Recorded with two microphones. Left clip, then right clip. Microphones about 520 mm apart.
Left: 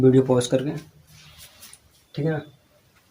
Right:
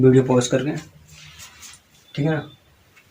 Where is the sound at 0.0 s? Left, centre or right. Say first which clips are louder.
Right 2 dB; left.